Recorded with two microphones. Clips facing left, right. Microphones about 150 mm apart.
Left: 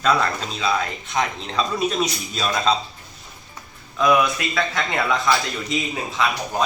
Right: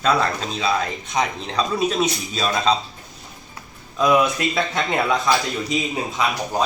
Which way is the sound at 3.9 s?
20° right (ahead or behind).